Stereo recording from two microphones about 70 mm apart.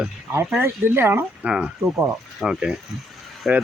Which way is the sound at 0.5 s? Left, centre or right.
Right.